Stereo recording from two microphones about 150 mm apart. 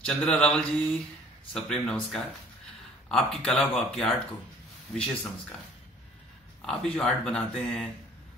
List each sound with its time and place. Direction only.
0.0 s mantra: 5° left (ahead or behind)
1.5 s speech: 5° left (ahead or behind)
4.9 s mantra: 5° left (ahead or behind)
6.6 s speech: 5° left (ahead or behind)